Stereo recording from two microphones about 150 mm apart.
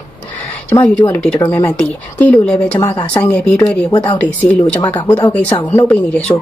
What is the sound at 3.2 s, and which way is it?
Speech, 10° left (ahead or behind).